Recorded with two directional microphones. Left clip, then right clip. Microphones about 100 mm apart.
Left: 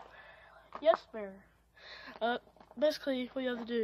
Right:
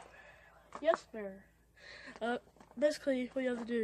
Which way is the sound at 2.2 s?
35° right (ahead or behind).